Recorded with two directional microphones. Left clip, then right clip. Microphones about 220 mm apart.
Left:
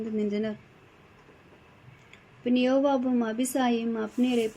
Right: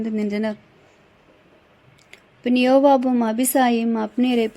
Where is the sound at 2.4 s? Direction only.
45° right (ahead or behind).